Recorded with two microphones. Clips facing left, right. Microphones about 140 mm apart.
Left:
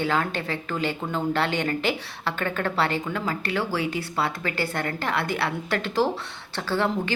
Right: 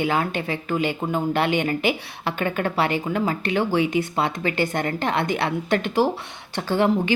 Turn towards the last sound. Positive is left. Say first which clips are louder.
# right 5 dB
turn(degrees=-15)  # may be behind; listen again after turning